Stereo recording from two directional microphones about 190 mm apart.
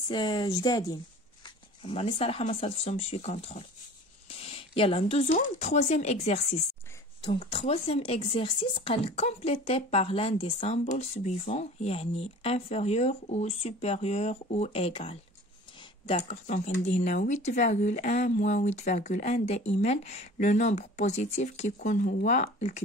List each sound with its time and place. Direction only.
0.1 s speech: 25° left (ahead or behind)
4.5 s a sound: 30° left (ahead or behind)
5.3 s speech: 35° left (ahead or behind)